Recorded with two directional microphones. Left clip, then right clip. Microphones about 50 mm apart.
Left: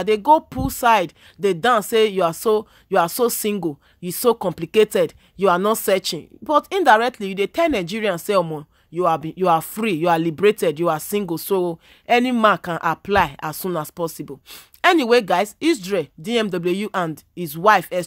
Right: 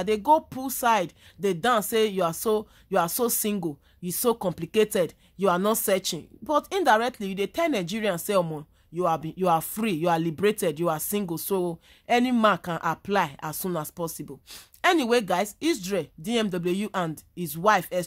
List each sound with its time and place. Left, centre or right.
0.0 s speech: left
15.8 s speech: left
17.4 s speech: centre
17.6 s speech: left